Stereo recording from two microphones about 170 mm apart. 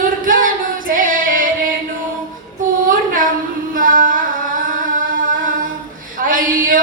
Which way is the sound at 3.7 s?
55° right (ahead or behind).